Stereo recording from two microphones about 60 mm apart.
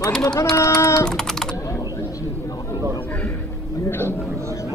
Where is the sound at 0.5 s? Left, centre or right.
Left.